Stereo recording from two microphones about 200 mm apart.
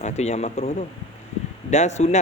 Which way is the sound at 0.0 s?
35° left (ahead or behind).